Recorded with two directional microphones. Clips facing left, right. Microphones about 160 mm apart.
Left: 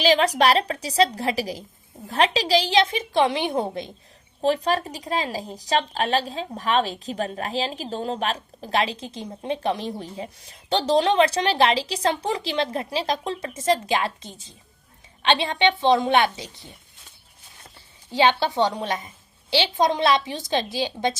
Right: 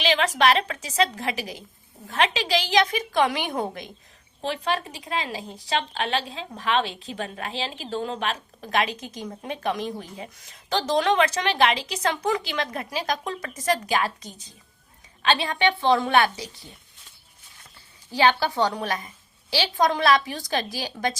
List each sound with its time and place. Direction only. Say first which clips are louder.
0.0 s a woman's voice: left 3 dB; 35° left (ahead or behind); by 16.6 s 20° left (ahead or behind)
18.1 s a woman's voice: left 1 dB; 20° left (ahead or behind)